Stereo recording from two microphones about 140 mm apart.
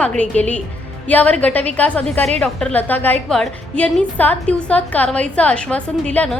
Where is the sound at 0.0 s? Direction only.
10° left (ahead or behind).